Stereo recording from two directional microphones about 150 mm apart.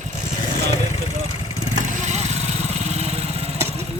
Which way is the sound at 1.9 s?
50° right (ahead or behind).